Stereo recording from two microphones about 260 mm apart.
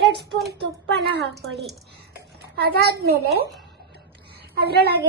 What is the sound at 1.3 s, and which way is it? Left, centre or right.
Speech, centre.